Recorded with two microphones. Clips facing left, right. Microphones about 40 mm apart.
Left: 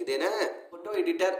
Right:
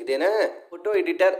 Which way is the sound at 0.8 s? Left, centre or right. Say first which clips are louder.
Right 6 dB; right.